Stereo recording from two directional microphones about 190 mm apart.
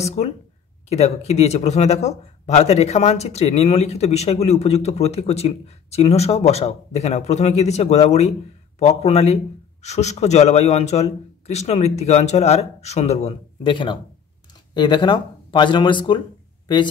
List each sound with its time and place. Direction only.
0.0 s speech: 35° left (ahead or behind)